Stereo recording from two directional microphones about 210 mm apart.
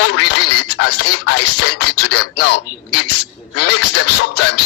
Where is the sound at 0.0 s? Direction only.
55° left (ahead or behind); by 1.4 s 75° left (ahead or behind).